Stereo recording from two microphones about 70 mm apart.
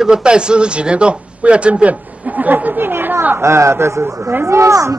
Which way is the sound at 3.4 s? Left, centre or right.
Right.